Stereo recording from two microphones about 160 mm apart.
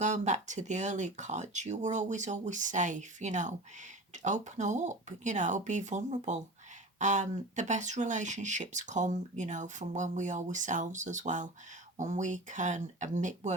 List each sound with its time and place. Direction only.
0.0 s speech: 50° right (ahead or behind)